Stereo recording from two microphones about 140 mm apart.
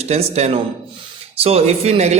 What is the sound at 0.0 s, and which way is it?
A man's voice, 50° right (ahead or behind).